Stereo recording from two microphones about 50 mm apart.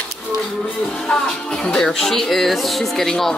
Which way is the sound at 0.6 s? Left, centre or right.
Centre.